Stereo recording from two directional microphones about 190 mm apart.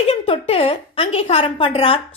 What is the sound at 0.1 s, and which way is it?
A woman's voice, 30° left (ahead or behind).